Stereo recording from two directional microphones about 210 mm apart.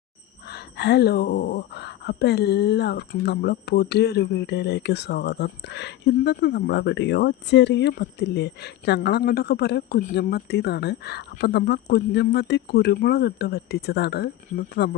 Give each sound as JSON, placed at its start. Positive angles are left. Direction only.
{"t": 0.4, "sound": "speech", "side_deg": 50}